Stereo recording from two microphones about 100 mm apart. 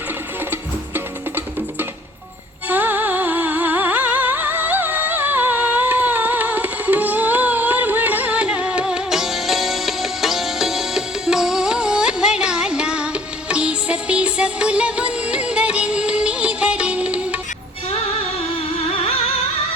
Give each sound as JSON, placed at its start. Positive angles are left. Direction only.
{"t": 0.5, "sound": "music", "side_deg": -20}